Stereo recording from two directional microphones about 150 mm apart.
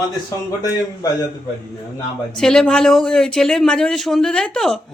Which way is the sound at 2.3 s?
5° left (ahead or behind).